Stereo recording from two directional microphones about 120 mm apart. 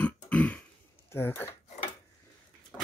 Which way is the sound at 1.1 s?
20° left (ahead or behind).